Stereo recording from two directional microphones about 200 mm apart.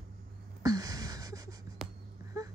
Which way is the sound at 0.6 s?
20° right (ahead or behind).